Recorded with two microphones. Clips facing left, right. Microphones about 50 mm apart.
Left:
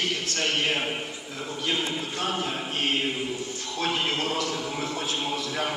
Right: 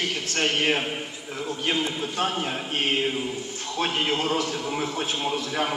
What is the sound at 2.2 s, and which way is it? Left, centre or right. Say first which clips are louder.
Speech: right 3 dB; right.